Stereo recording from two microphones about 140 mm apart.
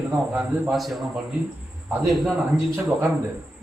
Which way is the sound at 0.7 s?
Centre (ahead or behind).